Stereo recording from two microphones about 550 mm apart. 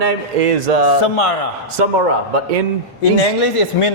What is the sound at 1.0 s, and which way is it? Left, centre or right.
Speech, left.